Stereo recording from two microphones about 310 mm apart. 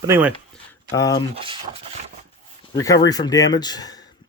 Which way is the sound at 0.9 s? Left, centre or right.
Centre.